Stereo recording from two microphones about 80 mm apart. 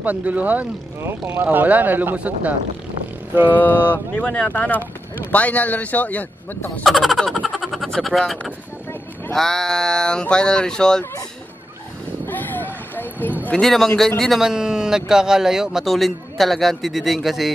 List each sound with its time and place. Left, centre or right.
0.0 s speech: centre
3.5 s speech: left
6.8 s a man's voice: centre
12.3 s a sound: left
13.6 s a man's voice: centre
14.4 s a man's voice: centre